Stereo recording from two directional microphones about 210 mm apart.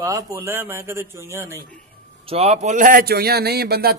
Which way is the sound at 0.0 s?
15° right (ahead or behind).